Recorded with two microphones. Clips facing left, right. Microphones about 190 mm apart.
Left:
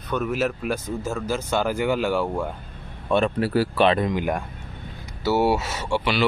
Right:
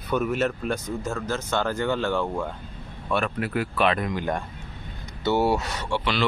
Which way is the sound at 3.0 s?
25° left (ahead or behind).